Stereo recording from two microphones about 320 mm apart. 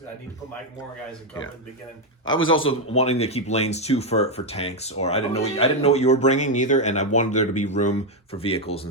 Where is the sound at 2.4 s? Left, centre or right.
Left.